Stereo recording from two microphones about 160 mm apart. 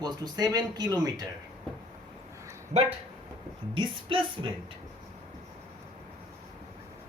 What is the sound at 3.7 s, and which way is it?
Speech, 35° right (ahead or behind).